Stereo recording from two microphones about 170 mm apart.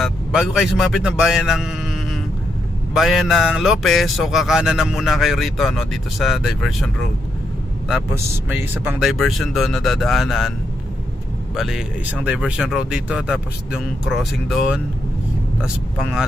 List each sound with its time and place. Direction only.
0.0 s speech: 5° right (ahead or behind)
8.1 s speech: 10° right (ahead or behind)
11.5 s speech: 5° right (ahead or behind)